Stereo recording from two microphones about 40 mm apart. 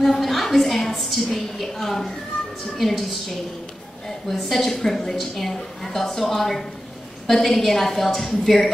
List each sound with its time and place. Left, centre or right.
0.0 s a woman's voice: centre
4.3 s a woman's voice: centre